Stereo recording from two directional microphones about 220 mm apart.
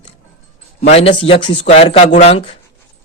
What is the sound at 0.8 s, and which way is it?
A man's voice, 30° left (ahead or behind).